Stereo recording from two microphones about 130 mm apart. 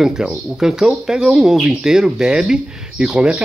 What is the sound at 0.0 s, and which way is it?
Speech, 5° right (ahead or behind).